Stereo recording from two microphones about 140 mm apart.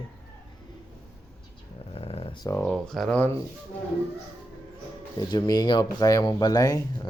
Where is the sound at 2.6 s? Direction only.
5° left (ahead or behind).